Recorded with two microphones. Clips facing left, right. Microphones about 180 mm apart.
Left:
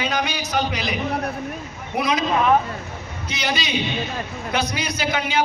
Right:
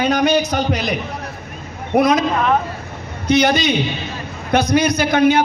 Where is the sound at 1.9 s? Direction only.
45° right (ahead or behind).